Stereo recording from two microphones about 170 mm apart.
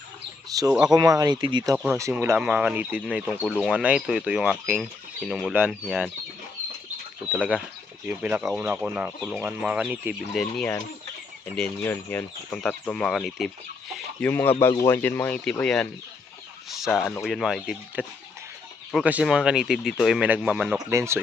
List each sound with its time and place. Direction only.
0.5 s speech: 20° right (ahead or behind); by 6.1 s 5° right (ahead or behind)
8.0 s speech: 10° right (ahead or behind)
11.5 s speech: 10° left (ahead or behind)
20.9 s speech: 15° right (ahead or behind)